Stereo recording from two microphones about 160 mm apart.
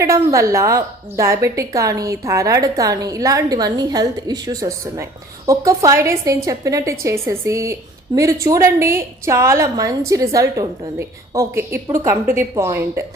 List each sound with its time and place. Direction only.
0.0 s a woman's voice: 20° right (ahead or behind)